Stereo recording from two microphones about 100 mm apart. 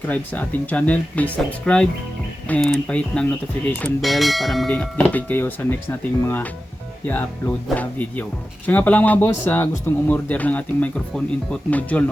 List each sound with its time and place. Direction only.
0.1 s speech: 15° left (ahead or behind)
4.0 s speech: centre (ahead or behind)
4.7 s speech: 15° left (ahead or behind)